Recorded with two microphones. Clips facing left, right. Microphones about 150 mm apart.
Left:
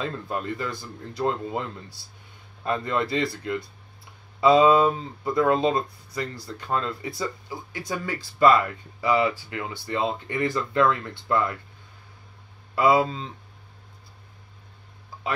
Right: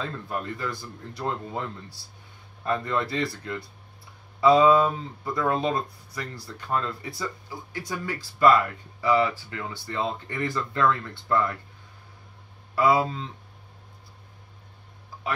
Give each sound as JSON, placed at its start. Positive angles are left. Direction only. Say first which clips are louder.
{"t": 0.0, "sound": "speech", "louder": "left 2 dB", "side_deg": 20}
{"t": 2.6, "sound": "speech", "louder": "left 1 dB", "side_deg": 20}
{"t": 12.7, "sound": "speech", "louder": "left 2 dB", "side_deg": 20}